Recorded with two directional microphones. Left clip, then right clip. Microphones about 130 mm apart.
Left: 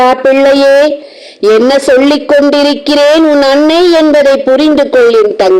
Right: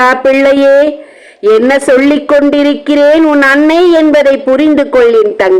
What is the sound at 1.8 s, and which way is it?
A man's voice, 25° left (ahead or behind).